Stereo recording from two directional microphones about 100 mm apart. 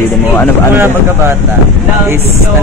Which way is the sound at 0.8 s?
25° right (ahead or behind).